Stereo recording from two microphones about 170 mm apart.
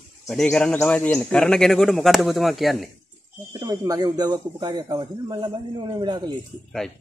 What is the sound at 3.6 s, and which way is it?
A man's voice, 20° right (ahead or behind).